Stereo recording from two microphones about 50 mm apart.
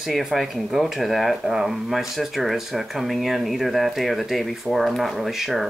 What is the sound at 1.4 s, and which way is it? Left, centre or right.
Speech, centre.